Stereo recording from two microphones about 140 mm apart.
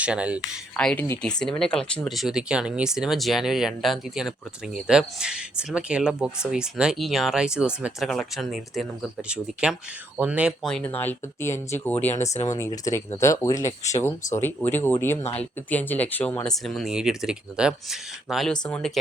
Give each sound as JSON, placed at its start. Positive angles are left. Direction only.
{"t": 0.0, "sound": "speech", "side_deg": -10}
{"t": 0.8, "sound": "speech", "side_deg": 5}
{"t": 10.7, "sound": "speech", "side_deg": 10}
{"t": 12.2, "sound": "speech", "side_deg": 55}
{"t": 12.5, "sound": "speech", "side_deg": 25}